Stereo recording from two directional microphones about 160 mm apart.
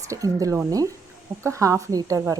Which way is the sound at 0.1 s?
20° right (ahead or behind).